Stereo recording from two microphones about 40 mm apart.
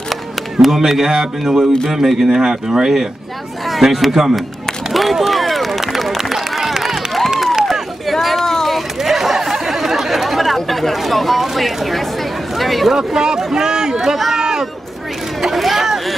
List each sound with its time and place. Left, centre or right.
0.6 s speech: centre
4.9 s run: centre
7.6 s a sound: centre
8.7 s chatter: centre
12.5 s speech: centre
12.9 s speech: centre
14.1 s speech: centre
14.4 s a sound: centre
15.4 s a sound: centre